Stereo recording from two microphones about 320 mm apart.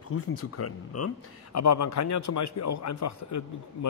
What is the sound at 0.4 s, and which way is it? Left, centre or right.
A man's voice, left.